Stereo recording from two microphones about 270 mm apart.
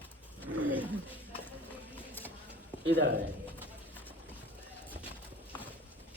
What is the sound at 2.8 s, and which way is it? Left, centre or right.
Speech, right.